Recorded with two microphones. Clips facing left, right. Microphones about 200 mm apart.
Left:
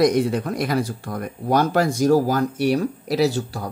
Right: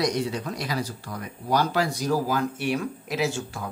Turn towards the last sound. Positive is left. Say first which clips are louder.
# left 7 dB
turn(degrees=35)  # may be behind; listen again after turning